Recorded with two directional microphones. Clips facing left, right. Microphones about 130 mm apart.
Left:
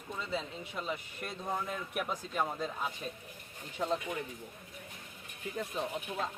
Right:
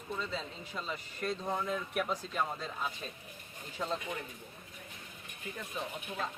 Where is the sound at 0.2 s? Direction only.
15° left (ahead or behind).